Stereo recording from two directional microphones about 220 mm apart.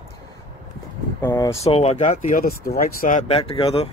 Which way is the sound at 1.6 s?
30° left (ahead or behind).